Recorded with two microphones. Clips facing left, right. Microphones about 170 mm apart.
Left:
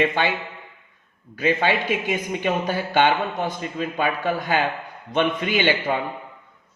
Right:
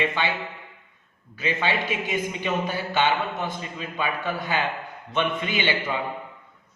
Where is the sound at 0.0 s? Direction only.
50° left (ahead or behind).